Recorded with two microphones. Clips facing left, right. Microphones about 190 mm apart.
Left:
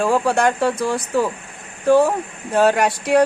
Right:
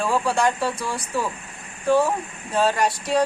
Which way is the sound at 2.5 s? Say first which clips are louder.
Left 5 dB; 55° left (ahead or behind).